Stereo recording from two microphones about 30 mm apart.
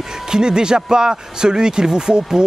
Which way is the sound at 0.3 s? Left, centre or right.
Right.